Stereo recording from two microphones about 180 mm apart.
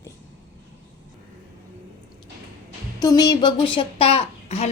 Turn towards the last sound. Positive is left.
turn(degrees=35)  # may be behind; listen again after turning